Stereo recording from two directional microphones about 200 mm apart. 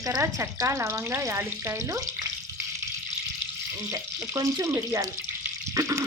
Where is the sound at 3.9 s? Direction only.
15° right (ahead or behind).